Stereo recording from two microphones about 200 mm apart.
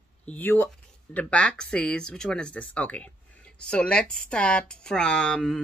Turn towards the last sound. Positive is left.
turn(degrees=5)  # may be behind; listen again after turning